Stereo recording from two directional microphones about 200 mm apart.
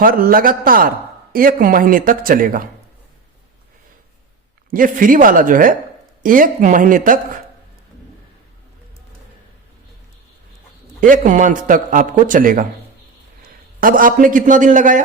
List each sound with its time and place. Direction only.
0.0 s a man's voice: 45° right (ahead or behind)
4.7 s a man's voice: 45° right (ahead or behind)
11.0 s a man's voice: 40° right (ahead or behind)
13.7 s a man's voice: 45° right (ahead or behind)